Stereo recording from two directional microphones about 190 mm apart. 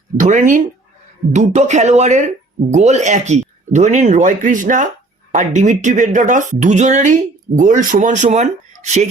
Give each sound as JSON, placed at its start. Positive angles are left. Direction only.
{"t": 0.2, "sound": "speech", "side_deg": -40}